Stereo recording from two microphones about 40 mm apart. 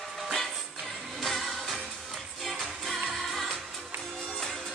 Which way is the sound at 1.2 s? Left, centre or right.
Centre.